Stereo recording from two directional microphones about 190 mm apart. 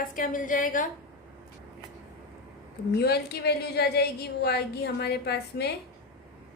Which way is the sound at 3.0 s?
55° left (ahead or behind).